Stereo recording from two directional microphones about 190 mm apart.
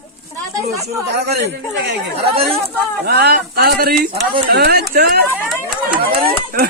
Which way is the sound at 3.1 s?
55° right (ahead or behind).